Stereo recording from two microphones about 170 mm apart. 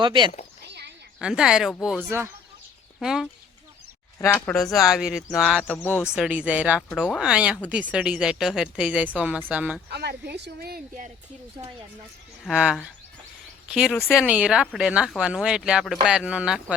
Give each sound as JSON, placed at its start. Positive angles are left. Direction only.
{"t": 0.0, "sound": "speech", "side_deg": -30}
{"t": 0.7, "sound": "a sound", "side_deg": -85}
{"t": 1.2, "sound": "speech", "side_deg": -5}
{"t": 2.0, "sound": "speech", "side_deg": -15}
{"t": 3.0, "sound": "speech", "side_deg": -5}
{"t": 4.2, "sound": "speech", "side_deg": 10}
{"t": 5.6, "sound": "speech", "side_deg": 10}
{"t": 6.1, "sound": "speech", "side_deg": -5}
{"t": 6.8, "sound": "speech", "side_deg": 5}
{"t": 9.9, "sound": "speech", "side_deg": -70}
{"t": 12.5, "sound": "speech", "side_deg": -5}